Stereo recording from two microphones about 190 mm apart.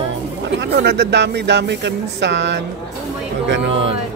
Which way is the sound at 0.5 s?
60° right (ahead or behind).